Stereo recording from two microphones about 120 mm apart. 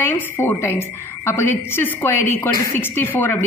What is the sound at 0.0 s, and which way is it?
A man's voice, 15° left (ahead or behind).